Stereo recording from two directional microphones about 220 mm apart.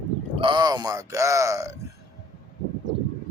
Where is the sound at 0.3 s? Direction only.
20° right (ahead or behind).